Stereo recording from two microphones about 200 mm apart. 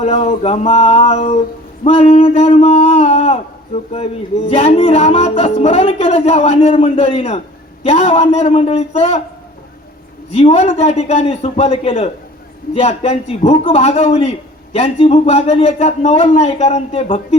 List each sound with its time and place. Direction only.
0.0 s a man's voice: 30° left (ahead or behind)
4.5 s a man's voice: 30° left (ahead or behind)
10.3 s a man's voice: 30° left (ahead or behind)